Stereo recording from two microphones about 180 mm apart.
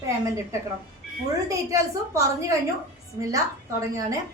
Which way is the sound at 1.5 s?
15° right (ahead or behind).